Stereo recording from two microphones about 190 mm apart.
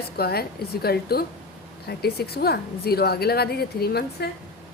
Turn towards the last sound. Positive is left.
turn(degrees=55)  # may be behind; listen again after turning